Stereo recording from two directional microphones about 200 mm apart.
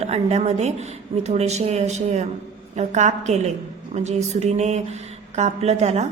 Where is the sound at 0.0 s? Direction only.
35° right (ahead or behind).